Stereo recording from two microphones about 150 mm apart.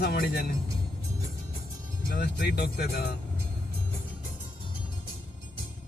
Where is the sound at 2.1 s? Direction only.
90° left.